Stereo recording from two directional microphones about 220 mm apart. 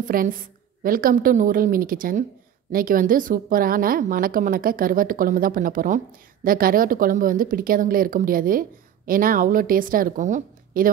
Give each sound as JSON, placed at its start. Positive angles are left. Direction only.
{"t": 0.0, "sound": "speech", "side_deg": -40}